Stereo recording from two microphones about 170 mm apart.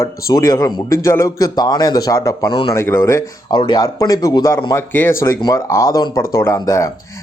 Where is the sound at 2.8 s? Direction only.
15° left (ahead or behind).